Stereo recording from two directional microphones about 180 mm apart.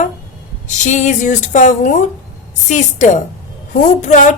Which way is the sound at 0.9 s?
40° left (ahead or behind).